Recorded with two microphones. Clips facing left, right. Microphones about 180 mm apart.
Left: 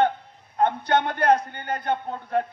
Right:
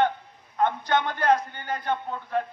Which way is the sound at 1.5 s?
50° left (ahead or behind).